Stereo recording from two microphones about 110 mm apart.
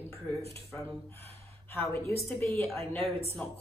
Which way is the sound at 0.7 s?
15° left (ahead or behind).